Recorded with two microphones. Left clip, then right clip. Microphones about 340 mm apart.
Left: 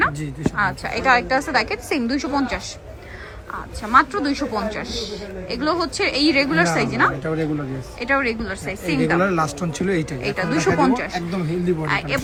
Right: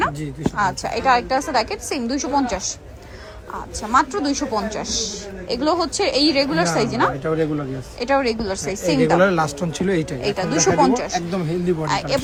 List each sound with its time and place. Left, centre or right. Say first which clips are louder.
0.5 s a woman's voice: right 1 dB; centre
3.8 s a woman's voice: left 2 dB; centre
9.3 s a woman's voice: right 1 dB; centre